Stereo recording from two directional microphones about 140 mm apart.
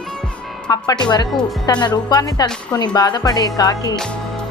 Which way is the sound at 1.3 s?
Centre (ahead or behind).